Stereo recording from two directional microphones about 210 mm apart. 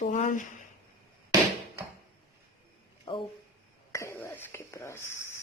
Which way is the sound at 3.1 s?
25° left (ahead or behind).